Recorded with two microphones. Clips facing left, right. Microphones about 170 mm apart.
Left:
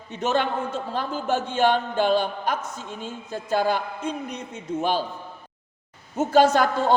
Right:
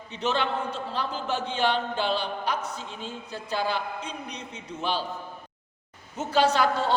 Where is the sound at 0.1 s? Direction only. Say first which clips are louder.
Left 3 dB; 50° left (ahead or behind).